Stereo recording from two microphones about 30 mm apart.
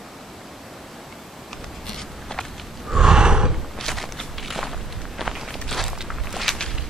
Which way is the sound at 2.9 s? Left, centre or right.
Right.